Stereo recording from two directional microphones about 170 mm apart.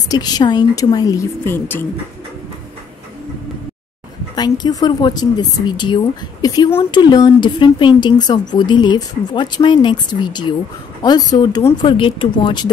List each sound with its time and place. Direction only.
0.1 s speech: 25° left (ahead or behind)
4.4 s speech: 25° left (ahead or behind)